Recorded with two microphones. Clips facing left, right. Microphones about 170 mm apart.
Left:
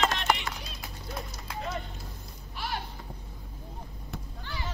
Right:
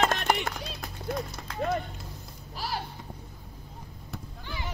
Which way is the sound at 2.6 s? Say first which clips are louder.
Right 1 dB; 35° right (ahead or behind).